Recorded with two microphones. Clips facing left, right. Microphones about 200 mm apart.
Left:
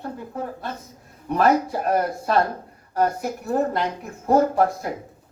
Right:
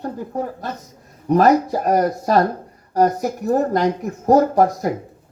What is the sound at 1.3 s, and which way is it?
Speech, 40° right (ahead or behind).